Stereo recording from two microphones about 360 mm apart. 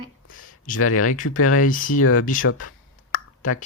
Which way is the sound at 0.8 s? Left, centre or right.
Left.